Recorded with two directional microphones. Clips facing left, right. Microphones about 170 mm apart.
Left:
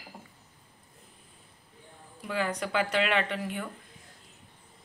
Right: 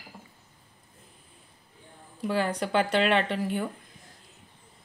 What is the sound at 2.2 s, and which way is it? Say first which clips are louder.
A woman's voice: right 4 dB; 30° right (ahead or behind).